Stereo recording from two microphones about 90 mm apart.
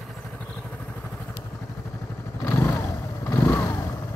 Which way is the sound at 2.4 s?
25° left (ahead or behind).